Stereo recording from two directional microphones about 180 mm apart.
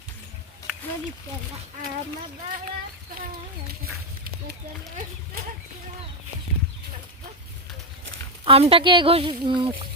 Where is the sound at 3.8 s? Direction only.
55° right (ahead or behind).